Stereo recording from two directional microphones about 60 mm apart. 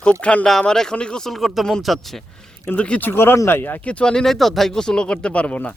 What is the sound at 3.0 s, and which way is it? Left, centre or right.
Speech, left.